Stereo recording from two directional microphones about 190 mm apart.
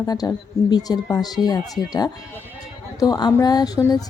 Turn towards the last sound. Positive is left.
turn(degrees=20)  # may be behind; listen again after turning